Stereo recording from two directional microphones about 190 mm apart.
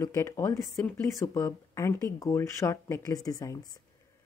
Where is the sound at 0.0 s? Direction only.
15° left (ahead or behind).